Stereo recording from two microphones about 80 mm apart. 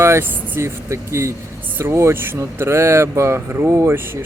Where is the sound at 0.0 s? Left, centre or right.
Right.